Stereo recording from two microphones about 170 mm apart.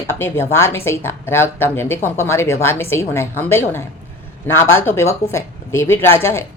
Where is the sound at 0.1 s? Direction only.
15° left (ahead or behind).